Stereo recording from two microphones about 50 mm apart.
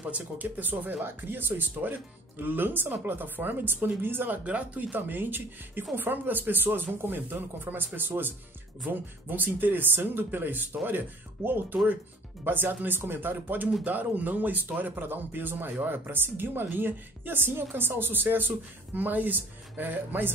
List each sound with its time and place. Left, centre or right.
0.0 s a woman's voice: right
4.5 s a woman's voice: right